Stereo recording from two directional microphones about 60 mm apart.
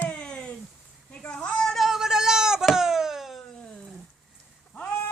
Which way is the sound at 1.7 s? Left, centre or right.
Centre.